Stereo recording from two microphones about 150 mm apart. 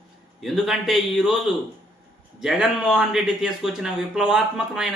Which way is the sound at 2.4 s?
Centre (ahead or behind).